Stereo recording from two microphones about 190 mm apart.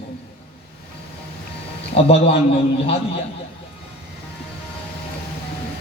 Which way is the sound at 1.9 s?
30° left (ahead or behind).